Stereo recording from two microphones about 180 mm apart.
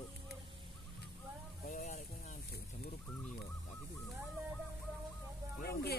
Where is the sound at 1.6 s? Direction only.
45° left (ahead or behind).